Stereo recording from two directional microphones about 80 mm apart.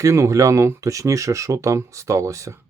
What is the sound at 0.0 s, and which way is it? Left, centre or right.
Speech, right.